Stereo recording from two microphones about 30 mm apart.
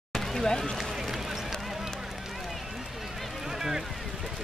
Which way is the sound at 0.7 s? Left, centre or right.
Centre.